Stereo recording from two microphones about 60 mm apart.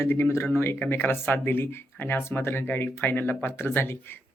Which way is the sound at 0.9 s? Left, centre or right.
Left.